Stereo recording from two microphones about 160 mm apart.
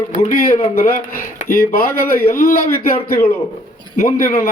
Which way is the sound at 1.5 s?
65° left (ahead or behind).